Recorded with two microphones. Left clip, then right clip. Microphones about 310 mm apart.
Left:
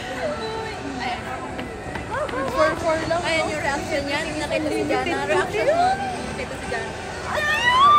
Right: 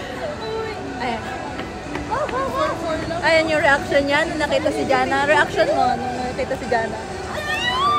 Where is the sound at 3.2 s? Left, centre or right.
Right.